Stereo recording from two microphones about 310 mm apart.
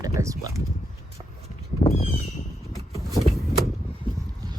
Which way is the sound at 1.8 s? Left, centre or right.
Centre.